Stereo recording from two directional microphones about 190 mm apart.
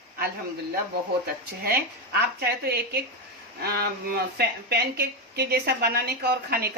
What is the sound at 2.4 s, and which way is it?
A woman's voice, 55° right (ahead or behind).